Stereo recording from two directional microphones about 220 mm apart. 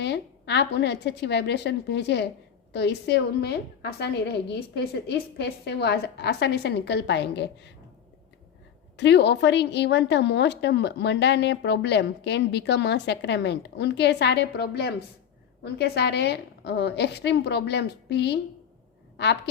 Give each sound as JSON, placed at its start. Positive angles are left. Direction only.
{"t": 0.0, "sound": "a woman's voice", "side_deg": 50}
{"t": 9.0, "sound": "a woman's voice", "side_deg": 50}